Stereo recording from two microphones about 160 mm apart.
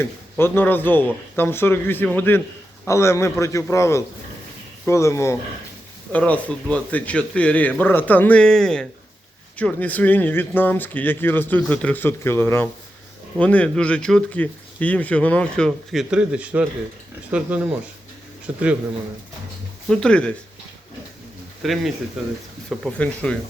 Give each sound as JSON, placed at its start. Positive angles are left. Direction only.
{"t": 0.0, "sound": "a man's voice", "side_deg": 15}
{"t": 19.9, "sound": "speech", "side_deg": 5}
{"t": 21.6, "sound": "speech", "side_deg": 0}